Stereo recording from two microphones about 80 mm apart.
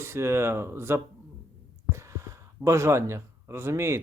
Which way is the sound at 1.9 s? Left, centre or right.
Right.